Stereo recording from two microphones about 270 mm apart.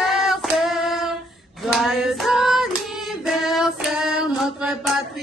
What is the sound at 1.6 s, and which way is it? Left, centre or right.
Singing, centre.